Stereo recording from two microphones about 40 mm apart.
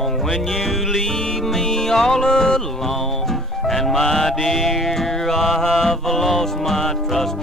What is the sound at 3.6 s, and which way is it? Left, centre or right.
Music, centre.